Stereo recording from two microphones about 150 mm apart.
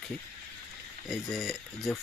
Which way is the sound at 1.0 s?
Centre (ahead or behind).